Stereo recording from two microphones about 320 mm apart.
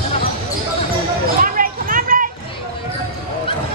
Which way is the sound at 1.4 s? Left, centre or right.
Right.